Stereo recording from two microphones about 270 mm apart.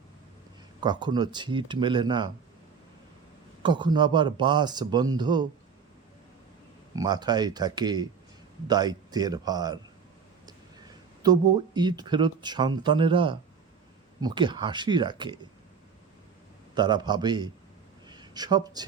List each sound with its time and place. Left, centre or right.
0.8 s speech: centre
3.6 s speech: centre
6.9 s speech: centre
11.2 s speech: centre
16.7 s speech: centre